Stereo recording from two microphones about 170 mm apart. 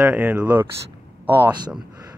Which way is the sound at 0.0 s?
10° right (ahead or behind).